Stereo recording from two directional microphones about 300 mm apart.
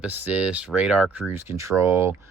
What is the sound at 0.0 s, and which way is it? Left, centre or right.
Speech, centre.